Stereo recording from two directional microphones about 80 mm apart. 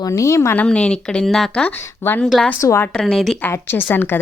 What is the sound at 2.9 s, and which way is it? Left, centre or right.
Speech, centre.